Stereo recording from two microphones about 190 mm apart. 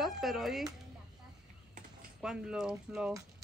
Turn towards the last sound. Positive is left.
turn(degrees=-5)  # may be behind; listen again after turning